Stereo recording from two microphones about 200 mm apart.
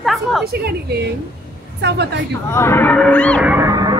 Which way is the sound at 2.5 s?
15° left (ahead or behind).